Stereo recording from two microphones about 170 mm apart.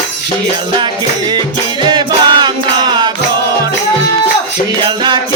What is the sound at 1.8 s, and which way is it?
Music, 25° right (ahead or behind).